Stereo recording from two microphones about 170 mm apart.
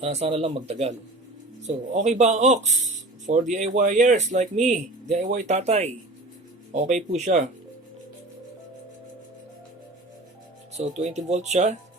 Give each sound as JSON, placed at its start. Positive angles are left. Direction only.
{"t": 0.0, "sound": "speech", "side_deg": -40}
{"t": 10.8, "sound": "speech", "side_deg": -40}